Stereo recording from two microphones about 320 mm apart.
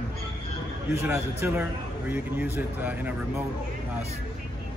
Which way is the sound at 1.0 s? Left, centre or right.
Centre.